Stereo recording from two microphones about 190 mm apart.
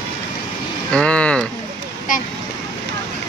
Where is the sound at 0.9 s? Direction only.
5° left (ahead or behind).